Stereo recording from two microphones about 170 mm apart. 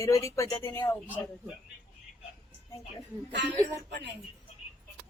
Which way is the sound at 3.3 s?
90° right.